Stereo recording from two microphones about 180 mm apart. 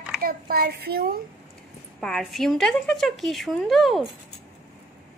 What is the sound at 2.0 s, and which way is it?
A woman's voice, centre (ahead or behind).